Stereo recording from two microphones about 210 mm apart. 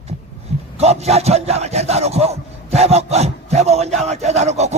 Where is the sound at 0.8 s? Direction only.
30° right (ahead or behind).